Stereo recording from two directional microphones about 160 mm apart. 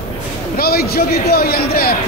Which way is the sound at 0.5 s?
70° left (ahead or behind).